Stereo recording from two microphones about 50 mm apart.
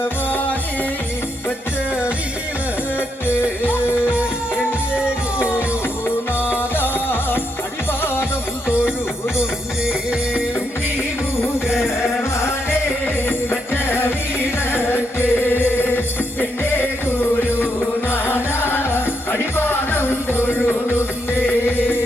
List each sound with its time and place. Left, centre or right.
0.0 s music: left
3.6 s music: left
5.4 s music: left
9.4 s music: centre
13.2 s music: left
18.1 s music: left